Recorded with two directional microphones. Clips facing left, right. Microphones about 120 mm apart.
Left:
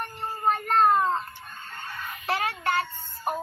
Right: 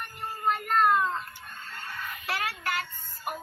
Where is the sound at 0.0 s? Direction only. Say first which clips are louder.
Left 3 dB; 30° left (ahead or behind).